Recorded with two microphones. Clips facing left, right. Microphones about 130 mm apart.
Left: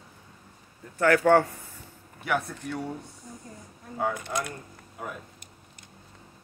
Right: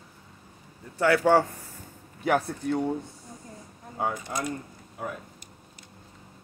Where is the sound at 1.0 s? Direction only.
15° right (ahead or behind).